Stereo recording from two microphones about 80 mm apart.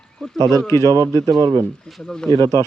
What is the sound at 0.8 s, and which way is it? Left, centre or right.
Speech, right.